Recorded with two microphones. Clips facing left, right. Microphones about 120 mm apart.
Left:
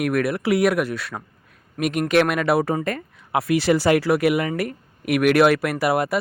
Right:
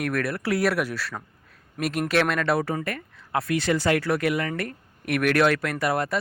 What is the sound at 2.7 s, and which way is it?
Speech, 25° left (ahead or behind).